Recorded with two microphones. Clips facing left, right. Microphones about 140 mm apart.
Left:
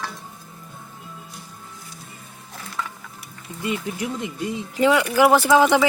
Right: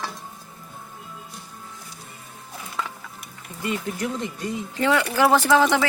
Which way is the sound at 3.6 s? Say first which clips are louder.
Even; 15° left (ahead or behind).